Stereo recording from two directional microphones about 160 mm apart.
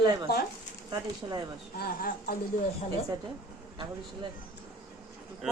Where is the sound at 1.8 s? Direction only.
65° left (ahead or behind).